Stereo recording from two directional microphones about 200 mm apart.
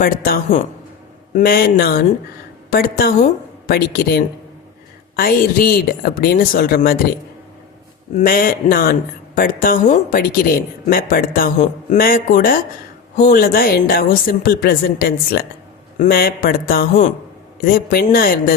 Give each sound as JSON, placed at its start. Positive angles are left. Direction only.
{"t": 0.0, "sound": "speech", "side_deg": 45}
{"t": 8.1, "sound": "speech", "side_deg": 45}